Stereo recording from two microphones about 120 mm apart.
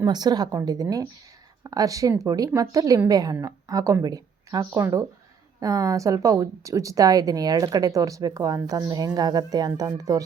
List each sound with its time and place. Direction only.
0.0 s a woman's voice: 35° right (ahead or behind)